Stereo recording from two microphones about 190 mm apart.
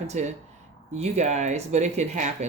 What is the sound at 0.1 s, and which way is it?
Speech, 40° right (ahead or behind).